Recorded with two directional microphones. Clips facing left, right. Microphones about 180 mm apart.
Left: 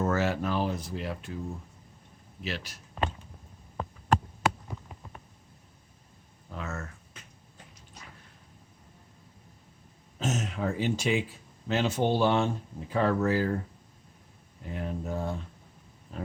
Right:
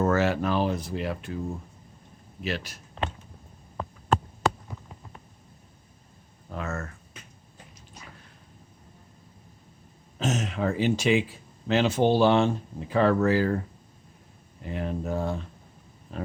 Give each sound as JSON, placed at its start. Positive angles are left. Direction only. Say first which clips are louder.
{"t": 0.0, "sound": "speech", "louder": "right 4 dB", "side_deg": -80}
{"t": 2.4, "sound": "speech", "louder": "right 5 dB", "side_deg": -50}
{"t": 6.5, "sound": "a sound", "louder": "right 4 dB", "side_deg": -55}
{"t": 10.2, "sound": "speech", "louder": "right 3 dB", "side_deg": -90}
{"t": 14.6, "sound": "speech", "louder": "right 4 dB", "side_deg": -90}